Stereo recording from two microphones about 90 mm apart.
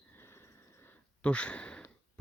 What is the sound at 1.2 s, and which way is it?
Speech, 15° left (ahead or behind).